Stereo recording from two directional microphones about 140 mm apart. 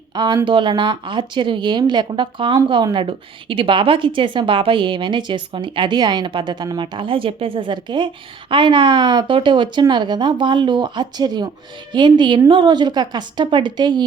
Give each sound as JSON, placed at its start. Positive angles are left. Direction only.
{"t": 0.4, "sound": "a woman's voice", "side_deg": -35}